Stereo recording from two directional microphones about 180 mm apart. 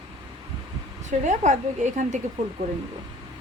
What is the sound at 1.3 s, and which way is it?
Speech, 40° right (ahead or behind).